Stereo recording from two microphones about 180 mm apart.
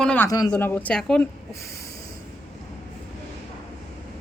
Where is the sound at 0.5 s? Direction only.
10° left (ahead or behind).